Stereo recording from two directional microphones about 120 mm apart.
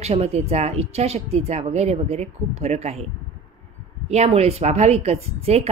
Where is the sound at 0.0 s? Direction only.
60° right (ahead or behind).